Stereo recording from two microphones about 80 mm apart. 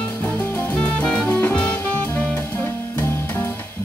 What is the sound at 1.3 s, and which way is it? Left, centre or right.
Jazz, centre.